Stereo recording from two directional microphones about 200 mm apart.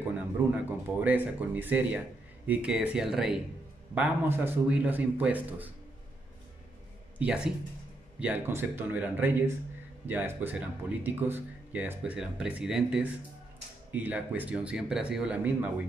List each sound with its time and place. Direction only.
0.4 s speech: 10° right (ahead or behind)
7.2 s speech: 5° right (ahead or behind)